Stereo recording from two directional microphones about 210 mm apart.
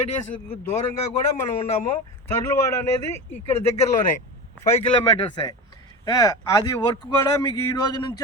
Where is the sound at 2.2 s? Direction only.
10° left (ahead or behind).